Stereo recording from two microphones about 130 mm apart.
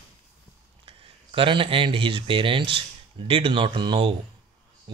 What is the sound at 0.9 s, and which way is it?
Speech, 45° right (ahead or behind).